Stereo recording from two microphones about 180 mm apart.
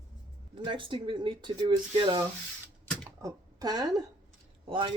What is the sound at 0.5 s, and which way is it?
Speech, 30° right (ahead or behind).